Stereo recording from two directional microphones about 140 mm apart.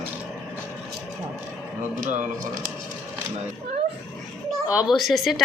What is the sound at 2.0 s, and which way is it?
Speech, 65° right (ahead or behind).